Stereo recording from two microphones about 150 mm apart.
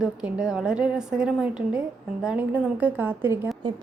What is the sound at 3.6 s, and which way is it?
Speech, 30° right (ahead or behind).